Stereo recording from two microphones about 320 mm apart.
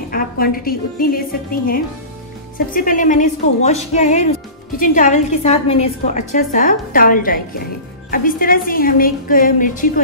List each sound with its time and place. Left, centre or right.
0.1 s a woman's voice: left